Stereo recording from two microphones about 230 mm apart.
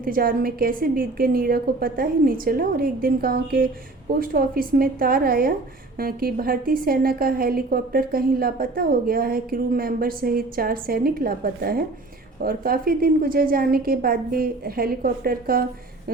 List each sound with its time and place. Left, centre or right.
0.0 s a woman's voice: right